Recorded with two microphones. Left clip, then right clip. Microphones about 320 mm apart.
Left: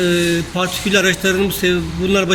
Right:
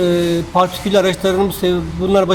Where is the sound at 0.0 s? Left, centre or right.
Right.